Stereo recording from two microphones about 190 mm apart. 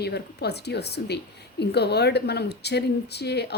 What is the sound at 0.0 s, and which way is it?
A woman's voice, 60° left (ahead or behind).